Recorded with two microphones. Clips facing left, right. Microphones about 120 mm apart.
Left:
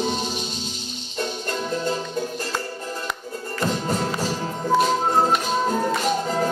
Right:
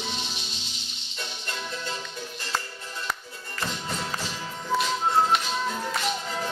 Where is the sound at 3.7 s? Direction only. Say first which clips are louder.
Left 9 dB; 45° left (ahead or behind).